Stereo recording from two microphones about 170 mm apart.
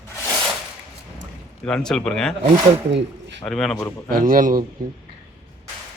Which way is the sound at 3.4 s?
Centre (ahead or behind).